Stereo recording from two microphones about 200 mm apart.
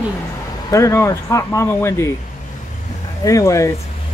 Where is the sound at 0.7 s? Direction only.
15° left (ahead or behind).